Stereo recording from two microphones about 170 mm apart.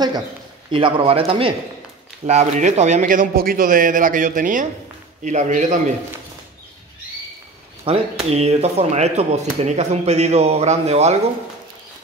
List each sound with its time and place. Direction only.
0.7 s speech: 30° right (ahead or behind)
2.2 s a man's voice: 45° right (ahead or behind)
7.8 s speech: 35° right (ahead or behind)